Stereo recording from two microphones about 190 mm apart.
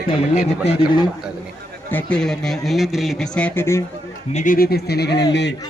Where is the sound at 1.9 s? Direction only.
10° left (ahead or behind).